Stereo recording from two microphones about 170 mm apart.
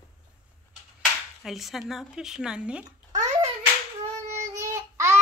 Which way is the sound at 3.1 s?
45° right (ahead or behind).